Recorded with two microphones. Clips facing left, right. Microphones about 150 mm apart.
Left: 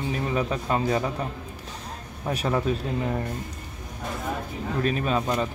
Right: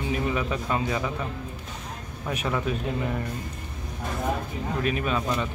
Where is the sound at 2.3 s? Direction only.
35° left (ahead or behind).